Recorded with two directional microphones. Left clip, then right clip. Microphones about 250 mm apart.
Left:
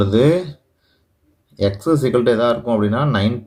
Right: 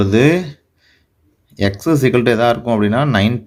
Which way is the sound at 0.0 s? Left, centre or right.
Right.